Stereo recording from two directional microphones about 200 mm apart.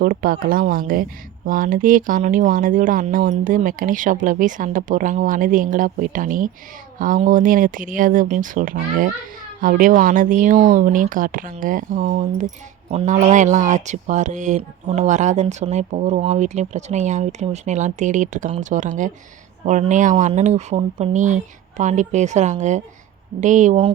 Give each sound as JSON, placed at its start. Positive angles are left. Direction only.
{"t": 0.0, "sound": "speech", "side_deg": -45}